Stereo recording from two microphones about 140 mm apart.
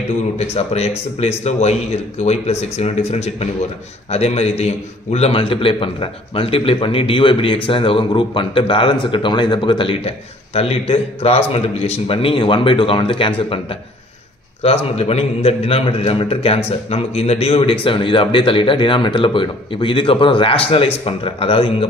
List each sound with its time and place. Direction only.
0.4 s a man's voice: 50° left (ahead or behind)
14.6 s a man's voice: 45° left (ahead or behind)